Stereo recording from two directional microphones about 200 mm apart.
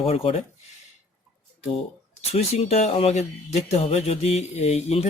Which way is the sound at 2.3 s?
30° left (ahead or behind).